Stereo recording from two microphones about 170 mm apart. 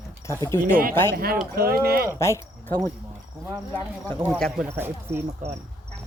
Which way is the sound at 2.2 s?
15° left (ahead or behind).